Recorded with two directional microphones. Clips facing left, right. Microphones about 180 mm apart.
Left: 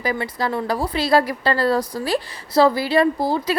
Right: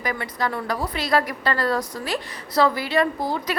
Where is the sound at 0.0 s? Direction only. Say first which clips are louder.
Left 3 dB; 30° left (ahead or behind).